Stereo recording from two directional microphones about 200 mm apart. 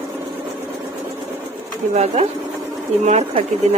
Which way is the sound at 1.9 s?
35° right (ahead or behind).